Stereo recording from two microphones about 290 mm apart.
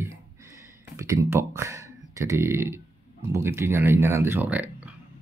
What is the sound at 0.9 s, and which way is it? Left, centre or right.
Speech, centre.